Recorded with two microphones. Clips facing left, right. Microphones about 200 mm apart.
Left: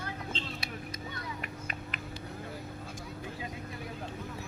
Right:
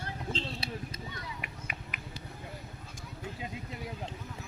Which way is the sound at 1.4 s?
10° right (ahead or behind).